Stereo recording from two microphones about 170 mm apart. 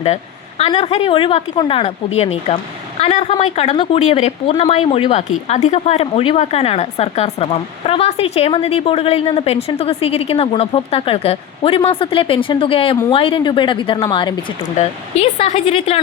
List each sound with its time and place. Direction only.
0.7 s a woman's voice: 35° left (ahead or behind)
14.8 s a woman's voice: 40° left (ahead or behind)